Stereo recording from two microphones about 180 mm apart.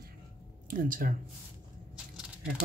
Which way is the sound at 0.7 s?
50° right (ahead or behind).